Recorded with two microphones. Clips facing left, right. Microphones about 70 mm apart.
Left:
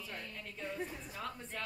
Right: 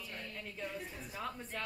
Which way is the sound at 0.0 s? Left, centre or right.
Centre.